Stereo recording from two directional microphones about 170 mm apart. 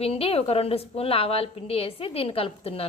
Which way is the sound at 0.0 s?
35° left (ahead or behind).